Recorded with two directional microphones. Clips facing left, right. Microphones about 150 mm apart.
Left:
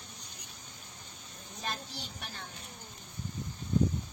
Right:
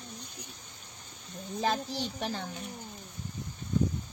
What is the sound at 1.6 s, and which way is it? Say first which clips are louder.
Speech: right 10 dB; 90° right.